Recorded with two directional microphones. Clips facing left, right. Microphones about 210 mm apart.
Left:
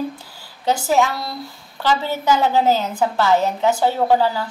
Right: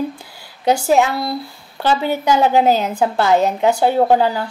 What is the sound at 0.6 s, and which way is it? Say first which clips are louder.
A woman's voice: right 3 dB; 15° right (ahead or behind).